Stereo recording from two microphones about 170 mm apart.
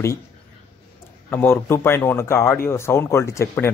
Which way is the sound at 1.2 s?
10° left (ahead or behind).